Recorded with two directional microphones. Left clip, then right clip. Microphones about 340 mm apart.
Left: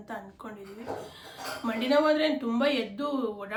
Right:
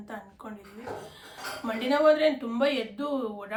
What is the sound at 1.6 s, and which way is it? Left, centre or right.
Speech, centre.